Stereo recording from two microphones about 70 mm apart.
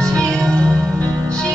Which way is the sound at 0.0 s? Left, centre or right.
Centre.